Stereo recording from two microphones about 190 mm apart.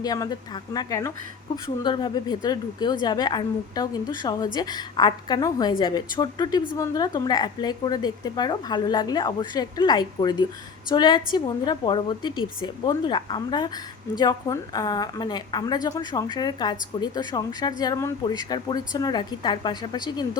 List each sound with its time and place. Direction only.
0.0 s a woman's voice: 20° left (ahead or behind)